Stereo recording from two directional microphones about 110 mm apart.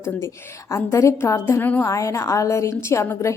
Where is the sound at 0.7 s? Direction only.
25° left (ahead or behind).